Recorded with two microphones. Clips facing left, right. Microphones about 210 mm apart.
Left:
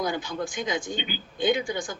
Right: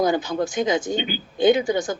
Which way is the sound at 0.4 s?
20° right (ahead or behind).